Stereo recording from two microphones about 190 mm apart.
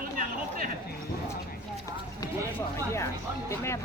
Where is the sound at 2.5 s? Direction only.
15° left (ahead or behind).